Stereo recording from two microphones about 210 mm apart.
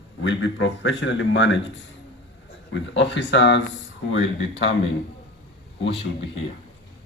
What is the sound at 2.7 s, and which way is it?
Speech, 60° left (ahead or behind).